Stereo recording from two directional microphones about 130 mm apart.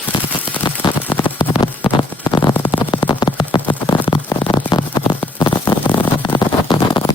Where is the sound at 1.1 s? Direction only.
40° left (ahead or behind).